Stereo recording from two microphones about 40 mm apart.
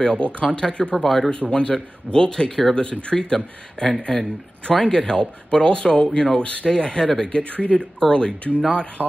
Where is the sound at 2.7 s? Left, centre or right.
Left.